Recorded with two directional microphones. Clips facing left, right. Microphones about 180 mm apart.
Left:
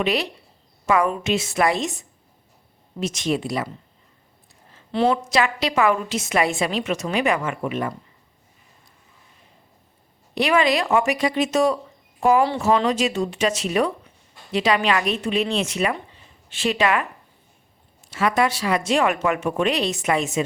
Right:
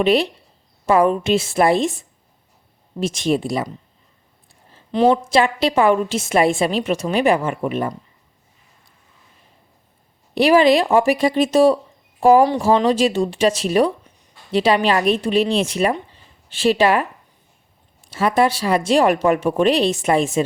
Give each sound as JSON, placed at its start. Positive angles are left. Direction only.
{"t": 0.0, "sound": "a woman's voice", "side_deg": -30}
{"t": 4.9, "sound": "a woman's voice", "side_deg": -15}
{"t": 5.1, "sound": "a woman's voice", "side_deg": -30}
{"t": 10.3, "sound": "speech", "side_deg": -30}
{"t": 18.1, "sound": "speech", "side_deg": -30}